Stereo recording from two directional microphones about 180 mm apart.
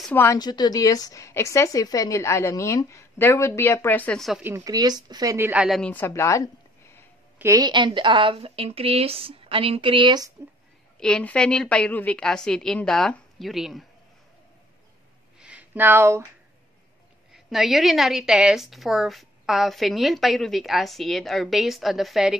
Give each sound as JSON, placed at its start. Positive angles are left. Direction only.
{"t": 0.0, "sound": "a woman's voice", "side_deg": 10}
{"t": 4.4, "sound": "a woman's voice", "side_deg": -15}
{"t": 5.8, "sound": "speech", "side_deg": 10}
{"t": 7.3, "sound": "speech", "side_deg": -15}
{"t": 11.0, "sound": "a woman's voice", "side_deg": 5}
{"t": 15.3, "sound": "a sound", "side_deg": -5}
{"t": 17.3, "sound": "a woman's voice", "side_deg": 0}